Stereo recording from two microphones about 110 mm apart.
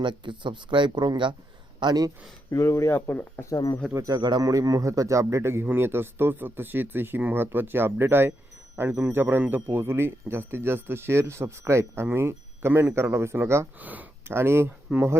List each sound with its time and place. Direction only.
0.0 s speech: 45° right (ahead or behind)
2.5 s speech: 25° left (ahead or behind)
3.5 s speech: 35° left (ahead or behind)
3.9 s a man's voice: 30° right (ahead or behind)